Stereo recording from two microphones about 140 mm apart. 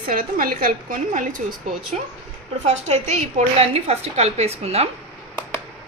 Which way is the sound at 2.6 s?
55° right (ahead or behind).